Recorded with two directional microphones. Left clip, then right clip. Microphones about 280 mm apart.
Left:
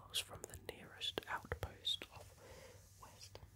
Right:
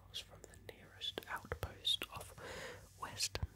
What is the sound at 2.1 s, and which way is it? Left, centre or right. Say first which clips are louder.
Whispering: right 9 dB; right.